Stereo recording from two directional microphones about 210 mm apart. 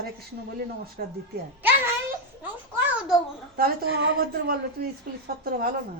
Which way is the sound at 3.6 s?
55° right (ahead or behind).